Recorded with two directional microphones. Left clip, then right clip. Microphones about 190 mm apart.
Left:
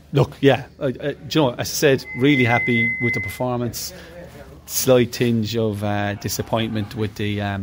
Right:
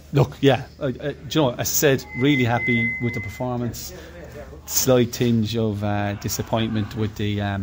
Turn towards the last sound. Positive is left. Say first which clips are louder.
# left 1 dB
turn(degrees=10)  # may be behind; listen again after turning